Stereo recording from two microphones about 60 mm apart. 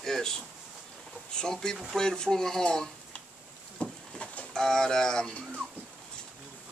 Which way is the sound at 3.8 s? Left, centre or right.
Left.